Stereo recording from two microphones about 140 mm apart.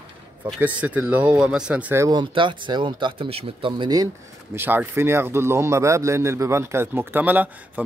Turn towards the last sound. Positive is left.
turn(degrees=-10)  # may be behind; listen again after turning